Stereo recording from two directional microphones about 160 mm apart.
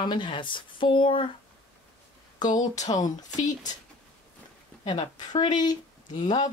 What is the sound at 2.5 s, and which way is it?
Speech, 50° left (ahead or behind).